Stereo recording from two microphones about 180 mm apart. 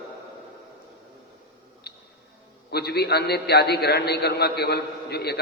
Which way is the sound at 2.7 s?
65° left (ahead or behind).